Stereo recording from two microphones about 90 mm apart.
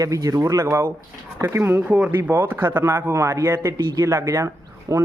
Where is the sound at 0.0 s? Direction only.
40° right (ahead or behind).